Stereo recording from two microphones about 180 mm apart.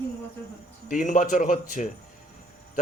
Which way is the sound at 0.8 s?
45° left (ahead or behind).